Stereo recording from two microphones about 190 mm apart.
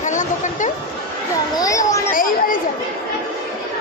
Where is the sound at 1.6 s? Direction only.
20° left (ahead or behind).